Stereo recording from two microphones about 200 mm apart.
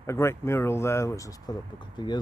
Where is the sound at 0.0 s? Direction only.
15° left (ahead or behind).